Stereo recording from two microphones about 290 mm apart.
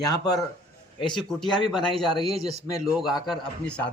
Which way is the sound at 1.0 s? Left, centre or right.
Centre.